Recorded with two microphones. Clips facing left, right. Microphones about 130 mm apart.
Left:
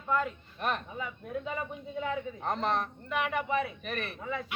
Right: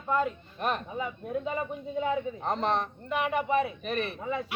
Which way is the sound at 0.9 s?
25° right (ahead or behind).